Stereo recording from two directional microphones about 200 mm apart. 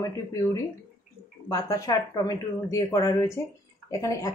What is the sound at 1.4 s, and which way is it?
Speech, 15° left (ahead or behind).